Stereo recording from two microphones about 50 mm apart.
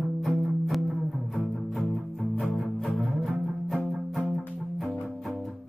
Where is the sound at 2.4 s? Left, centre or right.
Centre.